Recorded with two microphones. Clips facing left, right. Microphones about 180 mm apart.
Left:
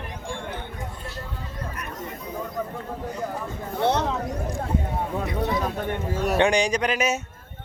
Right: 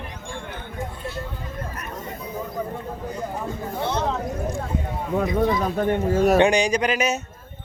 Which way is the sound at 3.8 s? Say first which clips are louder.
Left 4 dB; 65° left (ahead or behind).